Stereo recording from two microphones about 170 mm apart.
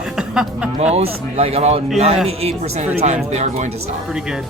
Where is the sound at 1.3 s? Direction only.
35° right (ahead or behind).